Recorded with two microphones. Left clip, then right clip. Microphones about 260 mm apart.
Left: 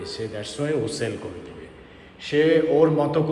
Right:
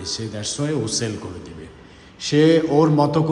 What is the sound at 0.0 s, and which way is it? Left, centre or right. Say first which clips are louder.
A man's voice: right 2 dB; centre.